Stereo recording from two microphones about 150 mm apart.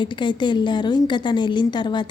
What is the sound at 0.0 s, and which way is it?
A woman's voice, 30° left (ahead or behind).